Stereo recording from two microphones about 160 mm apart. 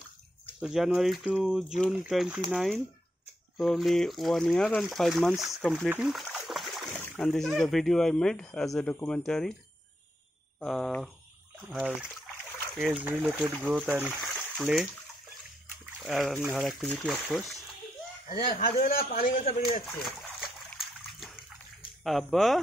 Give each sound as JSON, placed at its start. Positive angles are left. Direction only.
{"t": 0.7, "sound": "speech", "side_deg": -5}
{"t": 6.3, "sound": "splash", "side_deg": 0}
{"t": 6.9, "sound": "speech", "side_deg": 5}
{"t": 10.6, "sound": "speech", "side_deg": 5}
{"t": 13.8, "sound": "speech", "side_deg": -10}
{"t": 14.2, "sound": "a sound", "side_deg": 0}
{"t": 16.5, "sound": "speech", "side_deg": 5}
{"t": 18.3, "sound": "a man's voice", "side_deg": 70}
{"t": 20.0, "sound": "splash", "side_deg": 0}
{"t": 22.0, "sound": "speech", "side_deg": 0}